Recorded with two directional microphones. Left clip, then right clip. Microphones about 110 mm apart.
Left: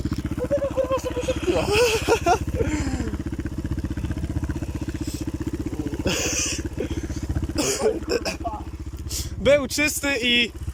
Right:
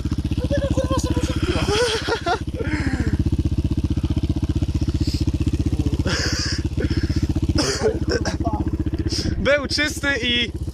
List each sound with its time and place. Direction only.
0.8 s vehicle: 15° left (ahead or behind)
6.1 s vehicle: 20° left (ahead or behind)
7.5 s a sound: 10° left (ahead or behind)
9.4 s vehicle: 30° left (ahead or behind)
9.8 s speech: 10° left (ahead or behind)